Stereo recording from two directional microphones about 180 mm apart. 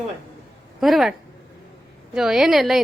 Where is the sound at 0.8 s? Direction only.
Centre (ahead or behind).